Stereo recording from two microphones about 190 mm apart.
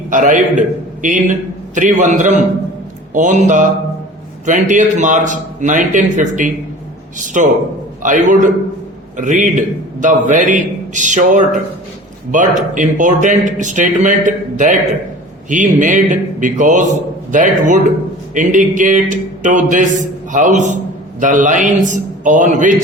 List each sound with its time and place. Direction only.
0.1 s a man's voice: 45° right (ahead or behind)